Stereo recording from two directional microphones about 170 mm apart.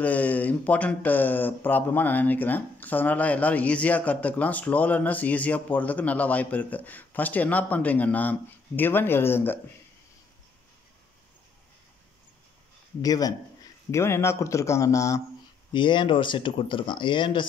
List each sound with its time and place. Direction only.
0.0 s speech: 10° left (ahead or behind)
13.0 s speech: 20° left (ahead or behind)